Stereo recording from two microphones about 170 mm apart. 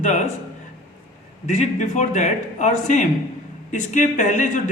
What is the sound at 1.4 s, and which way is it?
Speech, 45° left (ahead or behind).